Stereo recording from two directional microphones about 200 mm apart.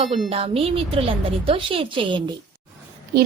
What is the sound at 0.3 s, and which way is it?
A woman's voice, 30° right (ahead or behind).